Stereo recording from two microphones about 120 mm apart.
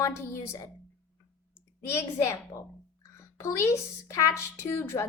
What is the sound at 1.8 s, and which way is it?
Speech, 20° left (ahead or behind).